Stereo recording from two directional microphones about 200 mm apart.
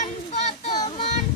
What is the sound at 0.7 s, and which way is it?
Child singing, 25° left (ahead or behind).